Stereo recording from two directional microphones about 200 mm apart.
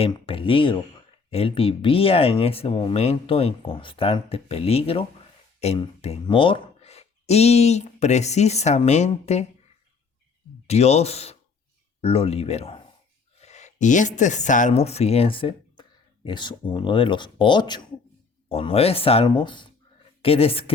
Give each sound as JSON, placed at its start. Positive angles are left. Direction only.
{"t": 0.0, "sound": "speech", "side_deg": 25}
{"t": 10.7, "sound": "speech", "side_deg": 30}